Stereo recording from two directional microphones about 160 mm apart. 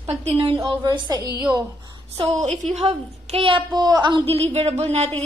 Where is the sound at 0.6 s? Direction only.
25° right (ahead or behind).